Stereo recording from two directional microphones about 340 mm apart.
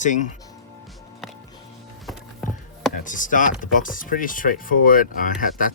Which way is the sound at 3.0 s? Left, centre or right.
Left.